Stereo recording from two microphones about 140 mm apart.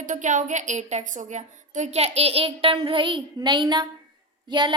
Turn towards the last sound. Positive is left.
turn(degrees=-35)  # may be behind; listen again after turning